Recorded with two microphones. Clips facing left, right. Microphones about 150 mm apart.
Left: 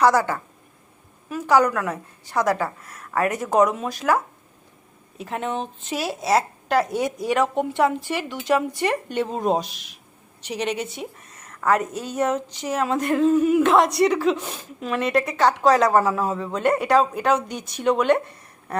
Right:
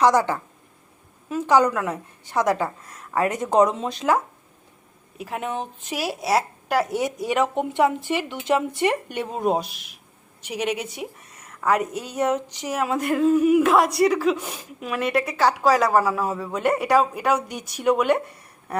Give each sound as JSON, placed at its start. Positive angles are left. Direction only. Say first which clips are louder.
{"t": 0.0, "sound": "a woman's voice", "louder": "even", "side_deg": -15}
{"t": 5.1, "sound": "a woman's voice", "louder": "left 1 dB", "side_deg": -10}